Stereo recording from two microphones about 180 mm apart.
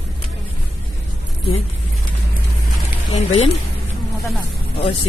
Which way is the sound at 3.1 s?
35° left (ahead or behind).